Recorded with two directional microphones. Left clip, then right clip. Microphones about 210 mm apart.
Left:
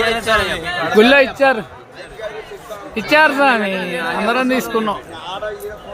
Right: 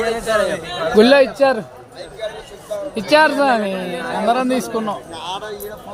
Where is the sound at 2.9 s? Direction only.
Centre (ahead or behind).